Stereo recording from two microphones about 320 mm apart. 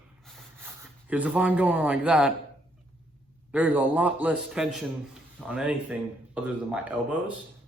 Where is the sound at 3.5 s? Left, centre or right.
Centre.